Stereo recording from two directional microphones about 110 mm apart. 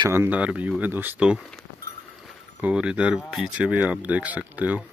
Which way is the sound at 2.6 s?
10° right (ahead or behind).